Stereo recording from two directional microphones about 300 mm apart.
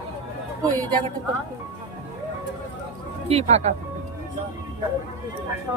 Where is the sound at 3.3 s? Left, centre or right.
Right.